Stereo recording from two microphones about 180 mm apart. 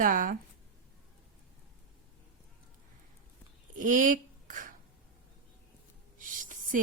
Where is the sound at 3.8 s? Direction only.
45° right (ahead or behind).